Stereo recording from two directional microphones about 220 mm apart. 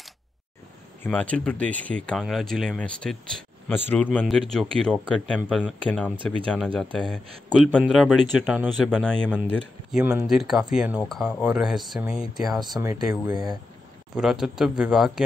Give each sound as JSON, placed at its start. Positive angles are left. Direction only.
{"t": 1.0, "sound": "speech", "side_deg": 5}
{"t": 12.7, "sound": "speech", "side_deg": -15}
{"t": 14.1, "sound": "speech", "side_deg": 0}